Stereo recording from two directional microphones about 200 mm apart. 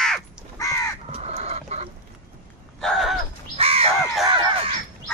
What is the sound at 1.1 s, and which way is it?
Chicken, 30° right (ahead or behind).